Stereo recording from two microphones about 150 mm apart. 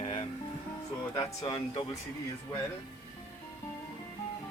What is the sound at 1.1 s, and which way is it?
Speech, 25° left (ahead or behind).